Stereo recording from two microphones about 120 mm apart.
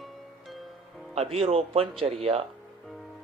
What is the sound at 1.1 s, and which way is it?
Speech, 60° right (ahead or behind).